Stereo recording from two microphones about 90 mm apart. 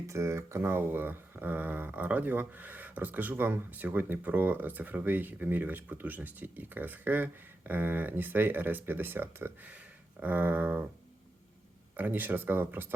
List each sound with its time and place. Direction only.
0.1 s speech: 30° right (ahead or behind)
11.9 s speech: 20° right (ahead or behind)